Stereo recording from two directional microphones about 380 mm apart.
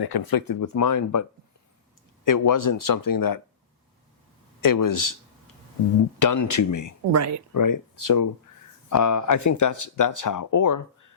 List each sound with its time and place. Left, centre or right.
0.0 s speech: left
2.2 s speech: left
4.6 s speech: left
6.1 s speech: left
7.1 s speech: right
7.5 s speech: left